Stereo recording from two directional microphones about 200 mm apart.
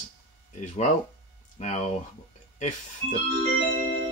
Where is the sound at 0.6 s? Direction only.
35° left (ahead or behind).